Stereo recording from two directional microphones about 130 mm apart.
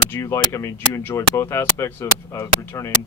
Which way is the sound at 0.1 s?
20° left (ahead or behind).